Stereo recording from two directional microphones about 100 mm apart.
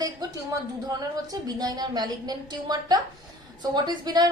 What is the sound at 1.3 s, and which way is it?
A woman's voice, 40° right (ahead or behind).